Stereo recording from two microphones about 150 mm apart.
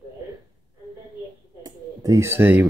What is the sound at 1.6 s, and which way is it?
Speech, 20° right (ahead or behind).